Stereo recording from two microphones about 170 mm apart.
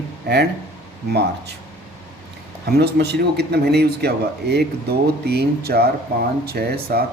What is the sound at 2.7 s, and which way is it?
Speech, 75° right (ahead or behind).